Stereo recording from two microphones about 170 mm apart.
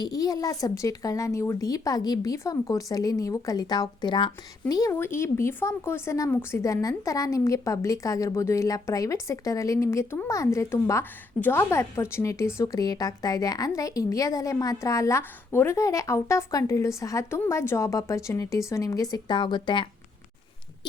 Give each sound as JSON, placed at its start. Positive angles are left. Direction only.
{"t": 0.0, "sound": "a woman's voice", "side_deg": 20}